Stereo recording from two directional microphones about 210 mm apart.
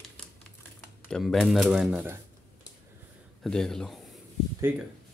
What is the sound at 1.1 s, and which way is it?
Speech, 5° left (ahead or behind).